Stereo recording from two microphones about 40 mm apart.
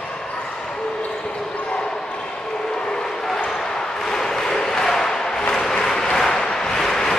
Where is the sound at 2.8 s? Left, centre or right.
Centre.